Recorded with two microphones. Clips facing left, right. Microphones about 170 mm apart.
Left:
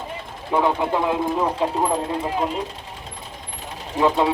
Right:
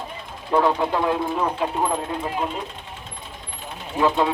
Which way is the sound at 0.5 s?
15° left (ahead or behind).